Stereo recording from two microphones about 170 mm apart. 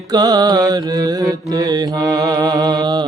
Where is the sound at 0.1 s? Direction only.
25° right (ahead or behind).